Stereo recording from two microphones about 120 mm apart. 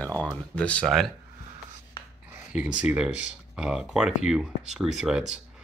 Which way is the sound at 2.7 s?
10° right (ahead or behind).